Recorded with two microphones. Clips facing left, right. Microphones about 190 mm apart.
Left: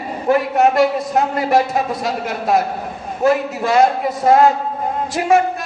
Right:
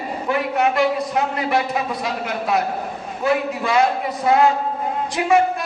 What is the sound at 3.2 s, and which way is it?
A man's voice, 45° left (ahead or behind).